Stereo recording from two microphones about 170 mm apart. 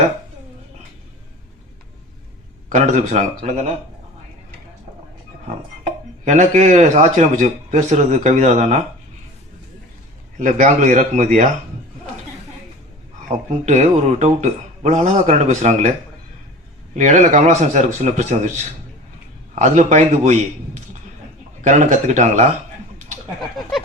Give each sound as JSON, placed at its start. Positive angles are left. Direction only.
{"t": 2.6, "sound": "speech", "side_deg": -45}
{"t": 5.5, "sound": "speech", "side_deg": -40}
{"t": 10.3, "sound": "speech", "side_deg": -45}
{"t": 13.2, "sound": "speech", "side_deg": -45}
{"t": 16.9, "sound": "speech", "side_deg": -45}
{"t": 19.5, "sound": "speech", "side_deg": -45}
{"t": 21.6, "sound": "speech", "side_deg": -45}